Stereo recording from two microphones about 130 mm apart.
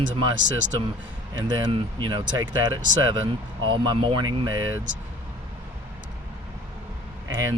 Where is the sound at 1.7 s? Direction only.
35° right (ahead or behind).